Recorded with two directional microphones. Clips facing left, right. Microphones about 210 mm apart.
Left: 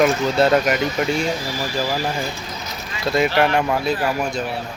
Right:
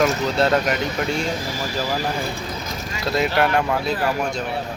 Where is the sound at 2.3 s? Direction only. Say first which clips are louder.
Right 3 dB; 45° right (ahead or behind).